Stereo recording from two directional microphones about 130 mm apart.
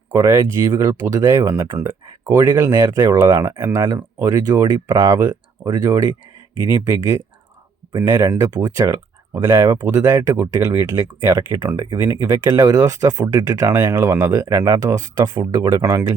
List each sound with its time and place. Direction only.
0.1 s speech: 20° right (ahead or behind)
8.6 s speech: 30° right (ahead or behind)
11.8 s speech: 30° right (ahead or behind)
13.7 s speech: 15° right (ahead or behind); by 15.8 s 35° right (ahead or behind)
15.8 s speech: 20° right (ahead or behind)